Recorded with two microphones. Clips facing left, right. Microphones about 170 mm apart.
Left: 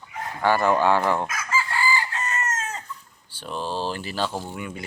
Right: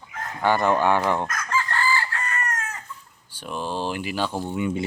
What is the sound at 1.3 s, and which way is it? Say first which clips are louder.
Chicken: right 1 dB; 5° left (ahead or behind).